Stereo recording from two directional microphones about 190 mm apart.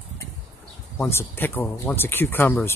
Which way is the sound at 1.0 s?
10° left (ahead or behind).